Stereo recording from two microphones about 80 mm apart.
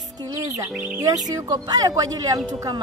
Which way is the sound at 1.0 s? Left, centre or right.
Right.